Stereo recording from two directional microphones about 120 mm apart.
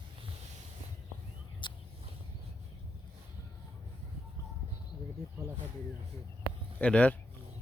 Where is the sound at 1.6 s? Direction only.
40° left (ahead or behind).